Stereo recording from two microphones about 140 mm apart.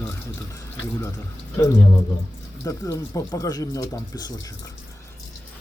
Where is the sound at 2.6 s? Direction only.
20° left (ahead or behind).